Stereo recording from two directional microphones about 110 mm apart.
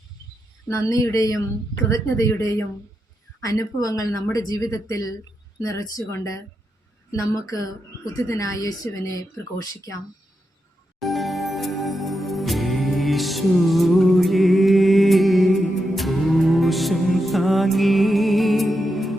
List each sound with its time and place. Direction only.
0.7 s speech: 30° left (ahead or behind)
11.0 s music: centre (ahead or behind)